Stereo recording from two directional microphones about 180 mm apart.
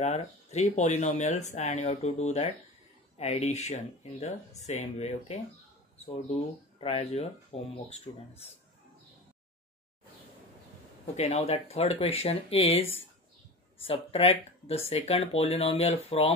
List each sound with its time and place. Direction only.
0.0 s speech: 40° left (ahead or behind)
11.1 s speech: 35° left (ahead or behind)
13.8 s speech: 30° left (ahead or behind)